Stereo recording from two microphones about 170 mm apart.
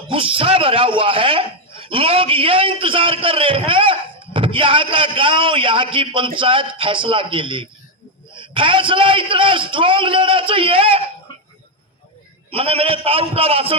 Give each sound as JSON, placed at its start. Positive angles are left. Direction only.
{"t": 0.1, "sound": "a man's voice", "side_deg": -30}
{"t": 12.5, "sound": "a man's voice", "side_deg": -35}